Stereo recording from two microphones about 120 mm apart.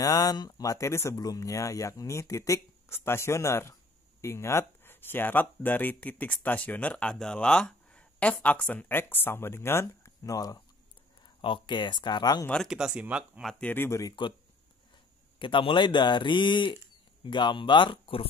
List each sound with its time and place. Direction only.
0.0 s speech: 30° left (ahead or behind)
11.4 s a man's voice: 45° left (ahead or behind)
12.6 s speech: 5° right (ahead or behind)
13.5 s speech: 10° left (ahead or behind)
13.8 s speech: 25° left (ahead or behind)
15.3 s a man's voice: 45° left (ahead or behind)